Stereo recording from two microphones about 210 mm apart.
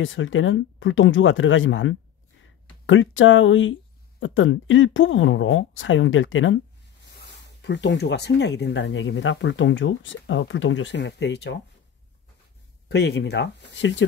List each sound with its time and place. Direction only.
0.0 s speech: 65° left (ahead or behind)
12.8 s speech: 50° left (ahead or behind)